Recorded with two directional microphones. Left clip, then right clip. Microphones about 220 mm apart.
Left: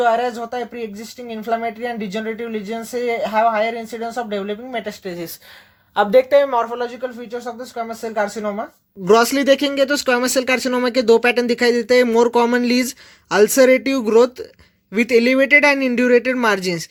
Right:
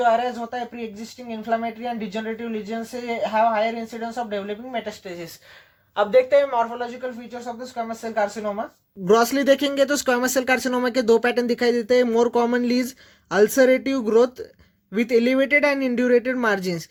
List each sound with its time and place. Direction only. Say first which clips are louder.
0.0 s speech: left 3 dB; 50° left (ahead or behind)
9.0 s speech: left 4 dB; centre (ahead or behind)